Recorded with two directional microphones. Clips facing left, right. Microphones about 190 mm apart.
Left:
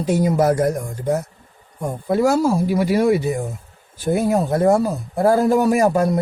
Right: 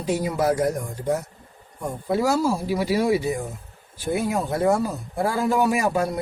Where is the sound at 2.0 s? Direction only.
50° left (ahead or behind).